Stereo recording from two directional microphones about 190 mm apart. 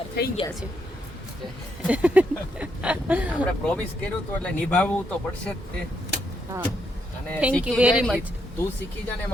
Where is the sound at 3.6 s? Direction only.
5° left (ahead or behind).